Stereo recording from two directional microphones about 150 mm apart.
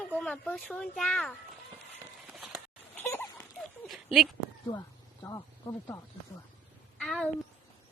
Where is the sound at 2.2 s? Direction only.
10° right (ahead or behind).